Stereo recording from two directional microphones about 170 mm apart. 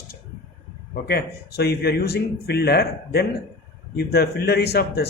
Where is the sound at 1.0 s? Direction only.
70° left (ahead or behind).